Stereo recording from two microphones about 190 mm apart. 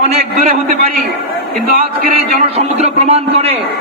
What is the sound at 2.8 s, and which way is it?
Speech, 35° right (ahead or behind).